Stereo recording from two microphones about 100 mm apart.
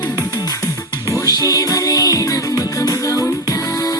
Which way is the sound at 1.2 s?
40° left (ahead or behind).